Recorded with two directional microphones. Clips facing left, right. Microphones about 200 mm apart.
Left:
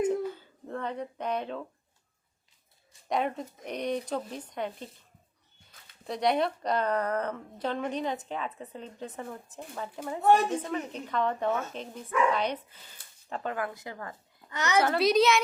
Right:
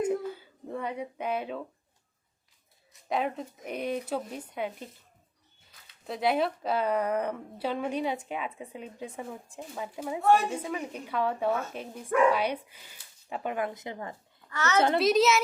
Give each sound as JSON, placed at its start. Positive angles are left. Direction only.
{"t": 0.3, "sound": "a sound", "side_deg": -10}
{"t": 3.1, "sound": "speech", "side_deg": 0}
{"t": 6.1, "sound": "a woman's voice", "side_deg": -5}
{"t": 14.5, "sound": "a child's voice", "side_deg": 15}
{"t": 14.9, "sound": "speech", "side_deg": 0}